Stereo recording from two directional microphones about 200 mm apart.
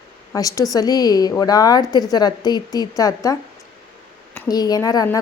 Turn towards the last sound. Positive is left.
turn(degrees=20)  # may be behind; listen again after turning